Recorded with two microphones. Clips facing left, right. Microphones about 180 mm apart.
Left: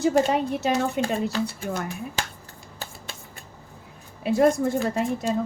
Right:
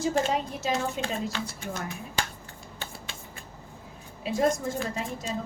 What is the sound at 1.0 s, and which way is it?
Speech, 60° left (ahead or behind).